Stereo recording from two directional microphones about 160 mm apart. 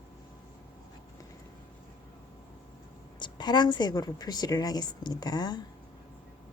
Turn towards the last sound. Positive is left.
turn(degrees=25)  # may be behind; listen again after turning